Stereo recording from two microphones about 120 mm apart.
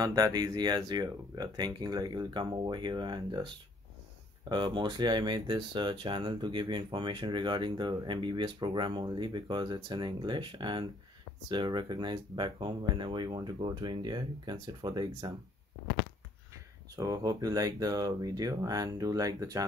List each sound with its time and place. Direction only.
0.0 s speech: 35° right (ahead or behind)
4.5 s speech: 40° right (ahead or behind)
16.9 s speech: 30° right (ahead or behind)